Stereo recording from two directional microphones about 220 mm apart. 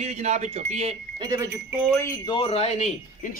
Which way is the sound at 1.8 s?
10° left (ahead or behind).